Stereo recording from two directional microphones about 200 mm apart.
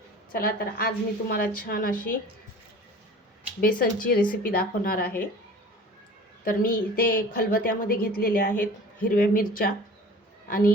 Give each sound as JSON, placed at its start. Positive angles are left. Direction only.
{"t": 0.3, "sound": "a woman's voice", "side_deg": 45}
{"t": 3.6, "sound": "a woman's voice", "side_deg": 45}
{"t": 6.4, "sound": "a woman's voice", "side_deg": 45}